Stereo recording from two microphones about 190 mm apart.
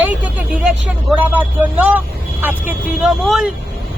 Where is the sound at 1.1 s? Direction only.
10° right (ahead or behind).